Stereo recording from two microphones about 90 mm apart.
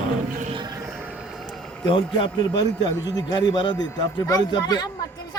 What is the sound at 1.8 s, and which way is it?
A man's voice, 65° left (ahead or behind).